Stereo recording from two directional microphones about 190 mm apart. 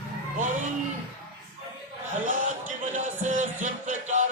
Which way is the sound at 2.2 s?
40° right (ahead or behind).